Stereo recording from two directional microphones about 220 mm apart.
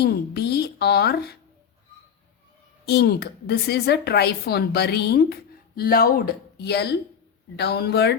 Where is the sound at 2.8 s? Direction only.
45° left (ahead or behind).